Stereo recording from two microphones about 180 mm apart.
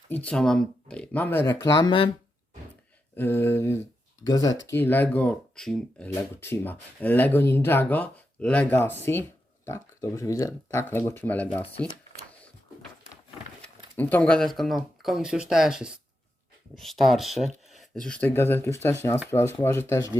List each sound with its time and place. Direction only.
0.1 s speech: 10° left (ahead or behind); by 2.0 s 25° left (ahead or behind)
3.2 s speech: 10° left (ahead or behind)
13.9 s speech: 10° left (ahead or behind)